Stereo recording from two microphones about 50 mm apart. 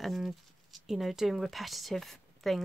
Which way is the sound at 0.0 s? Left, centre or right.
Centre.